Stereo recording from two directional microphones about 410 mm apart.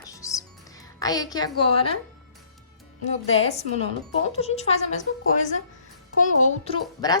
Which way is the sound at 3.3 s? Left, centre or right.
Centre.